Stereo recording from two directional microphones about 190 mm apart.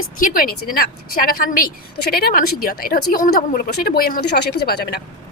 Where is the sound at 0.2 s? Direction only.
45° left (ahead or behind).